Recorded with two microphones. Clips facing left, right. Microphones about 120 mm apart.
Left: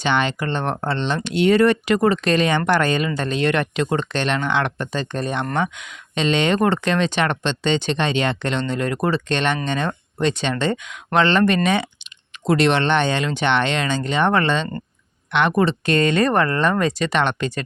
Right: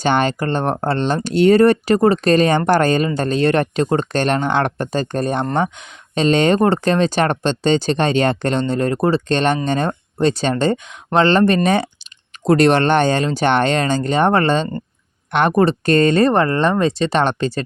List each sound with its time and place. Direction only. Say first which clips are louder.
0.0 s speech: right 4 dB; 40° right (ahead or behind)